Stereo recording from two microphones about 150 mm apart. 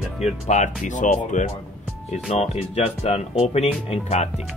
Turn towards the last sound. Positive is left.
turn(degrees=45)  # may be behind; listen again after turning